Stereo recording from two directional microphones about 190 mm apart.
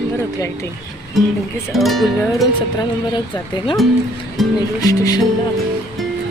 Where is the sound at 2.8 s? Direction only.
25° left (ahead or behind).